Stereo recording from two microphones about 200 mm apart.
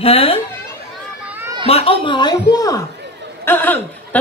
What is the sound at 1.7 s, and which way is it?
A woman's voice, 30° left (ahead or behind).